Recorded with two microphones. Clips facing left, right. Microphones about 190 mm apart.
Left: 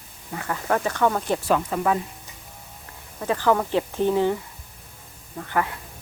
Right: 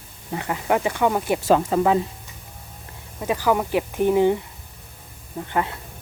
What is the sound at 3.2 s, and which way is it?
Speech, 15° right (ahead or behind).